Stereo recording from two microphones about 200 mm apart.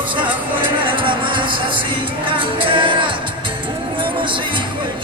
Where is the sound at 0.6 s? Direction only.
25° right (ahead or behind).